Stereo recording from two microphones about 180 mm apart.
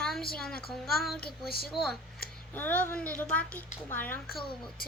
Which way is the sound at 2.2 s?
55° left (ahead or behind).